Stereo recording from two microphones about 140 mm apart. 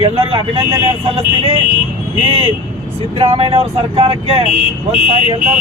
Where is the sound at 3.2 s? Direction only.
40° right (ahead or behind).